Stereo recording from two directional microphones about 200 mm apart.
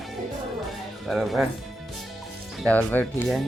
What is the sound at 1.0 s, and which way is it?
Speech, centre (ahead or behind).